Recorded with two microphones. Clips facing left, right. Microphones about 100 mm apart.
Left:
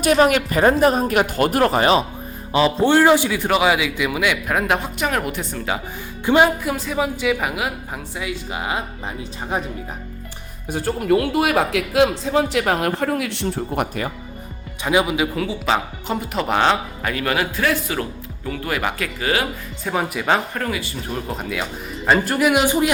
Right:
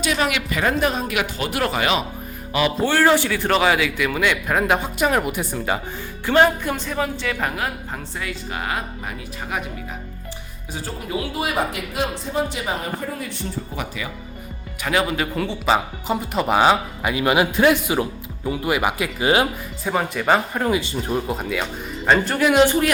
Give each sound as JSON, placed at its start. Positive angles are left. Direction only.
{"t": 0.0, "sound": "speech", "side_deg": 45}
{"t": 6.2, "sound": "a woman's voice", "side_deg": 15}
{"t": 6.7, "sound": "a woman's voice", "side_deg": 5}
{"t": 10.7, "sound": "speech", "side_deg": 55}
{"t": 14.8, "sound": "speech", "side_deg": 15}
{"t": 19.8, "sound": "speech", "side_deg": 0}
{"t": 20.5, "sound": "speech", "side_deg": -20}
{"t": 21.2, "sound": "speech", "side_deg": 0}